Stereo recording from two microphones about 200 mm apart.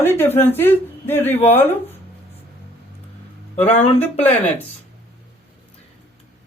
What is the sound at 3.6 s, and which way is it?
Speech, 30° left (ahead or behind).